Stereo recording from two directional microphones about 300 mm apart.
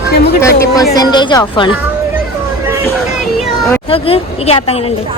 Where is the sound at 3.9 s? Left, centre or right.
Centre.